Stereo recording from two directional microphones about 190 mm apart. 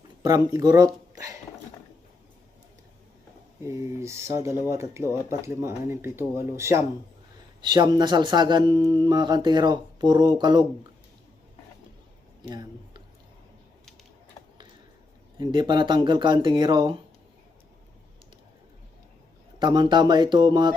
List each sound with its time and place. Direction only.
0.2 s speech: 20° right (ahead or behind)
3.7 s speech: 15° right (ahead or behind)
12.4 s speech: 20° right (ahead or behind)
15.4 s speech: 25° right (ahead or behind)
19.5 s speech: 25° right (ahead or behind)